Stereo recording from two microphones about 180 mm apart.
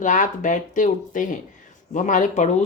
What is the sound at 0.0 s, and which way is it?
Speech, 45° left (ahead or behind).